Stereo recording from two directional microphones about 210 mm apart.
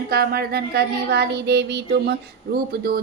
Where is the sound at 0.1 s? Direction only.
50° right (ahead or behind).